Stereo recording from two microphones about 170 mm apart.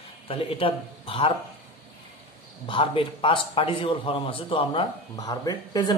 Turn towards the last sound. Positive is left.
turn(degrees=20)  # may be behind; listen again after turning